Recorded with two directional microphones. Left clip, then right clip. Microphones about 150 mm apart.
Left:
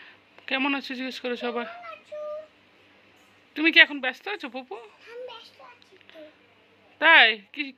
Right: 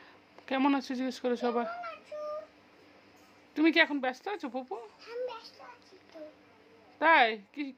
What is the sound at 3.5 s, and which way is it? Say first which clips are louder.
Speech: left 8 dB; 15° right (ahead or behind).